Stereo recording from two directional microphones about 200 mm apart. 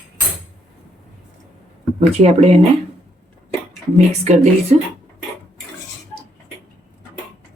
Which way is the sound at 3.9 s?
35° right (ahead or behind).